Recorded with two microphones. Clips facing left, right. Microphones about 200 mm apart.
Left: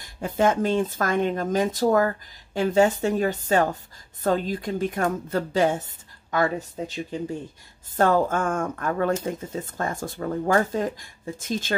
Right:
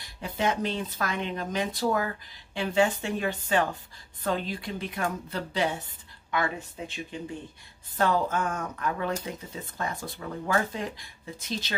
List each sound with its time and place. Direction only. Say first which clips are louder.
0.0 s speech: left 7 dB; 45° left (ahead or behind)